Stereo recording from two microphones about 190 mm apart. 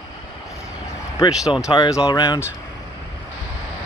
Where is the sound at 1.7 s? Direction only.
20° left (ahead or behind).